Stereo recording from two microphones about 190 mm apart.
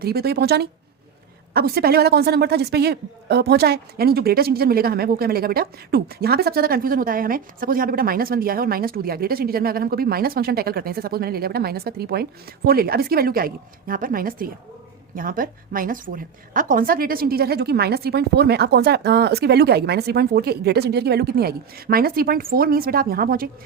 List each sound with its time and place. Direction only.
0.0 s a woman's voice: 55° right (ahead or behind)